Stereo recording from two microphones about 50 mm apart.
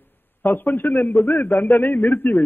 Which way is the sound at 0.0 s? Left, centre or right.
Left.